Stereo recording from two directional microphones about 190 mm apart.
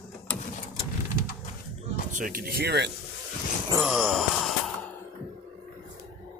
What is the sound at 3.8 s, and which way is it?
Wail, 5° right (ahead or behind).